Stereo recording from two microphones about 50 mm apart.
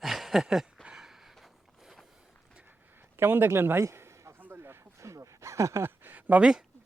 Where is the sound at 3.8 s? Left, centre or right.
Right.